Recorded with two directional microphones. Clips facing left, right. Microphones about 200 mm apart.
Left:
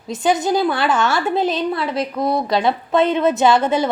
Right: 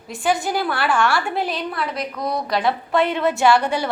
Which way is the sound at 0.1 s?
20° left (ahead or behind).